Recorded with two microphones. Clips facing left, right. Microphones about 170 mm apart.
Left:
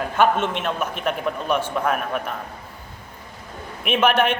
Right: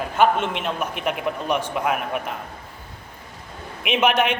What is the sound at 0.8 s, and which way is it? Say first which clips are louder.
A man's voice: left 1 dB; 15° right (ahead or behind).